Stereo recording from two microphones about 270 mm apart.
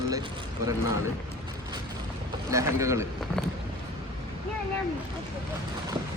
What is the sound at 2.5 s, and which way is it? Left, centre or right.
Speech, centre.